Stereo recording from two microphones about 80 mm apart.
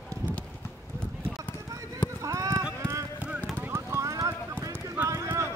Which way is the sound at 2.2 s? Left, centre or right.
Right.